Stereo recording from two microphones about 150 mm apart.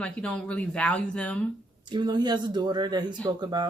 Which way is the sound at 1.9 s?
30° right (ahead or behind).